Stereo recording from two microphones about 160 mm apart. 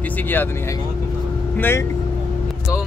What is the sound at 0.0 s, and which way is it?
Speech, 10° left (ahead or behind).